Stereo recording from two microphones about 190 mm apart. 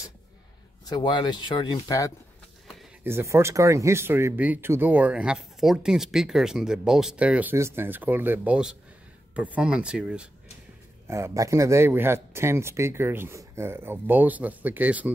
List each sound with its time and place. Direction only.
0.8 s speech: 20° left (ahead or behind)
3.0 s speech: 10° right (ahead or behind)